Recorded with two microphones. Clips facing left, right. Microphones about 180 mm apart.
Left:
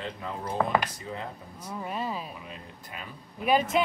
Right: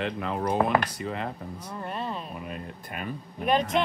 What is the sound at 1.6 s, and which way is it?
Speech, 5° left (ahead or behind).